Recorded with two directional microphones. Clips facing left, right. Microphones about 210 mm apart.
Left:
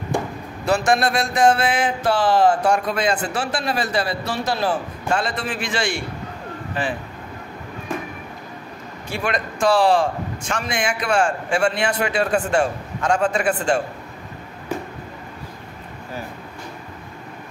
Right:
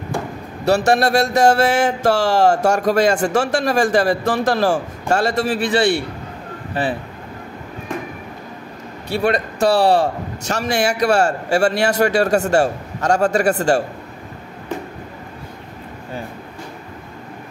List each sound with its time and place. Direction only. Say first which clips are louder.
0.8 s a sound: right 4 dB; 40° right (ahead or behind)
6.7 s speech: right 4 dB; 35° right (ahead or behind)
9.2 s a man's voice: right 4 dB; 35° right (ahead or behind)